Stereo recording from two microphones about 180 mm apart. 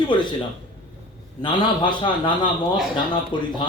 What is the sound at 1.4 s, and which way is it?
A man's voice, 25° left (ahead or behind).